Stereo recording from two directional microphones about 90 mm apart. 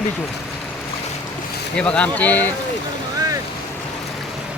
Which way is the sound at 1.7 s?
10° left (ahead or behind).